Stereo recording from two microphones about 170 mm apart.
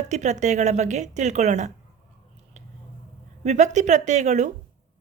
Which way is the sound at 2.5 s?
40° right (ahead or behind).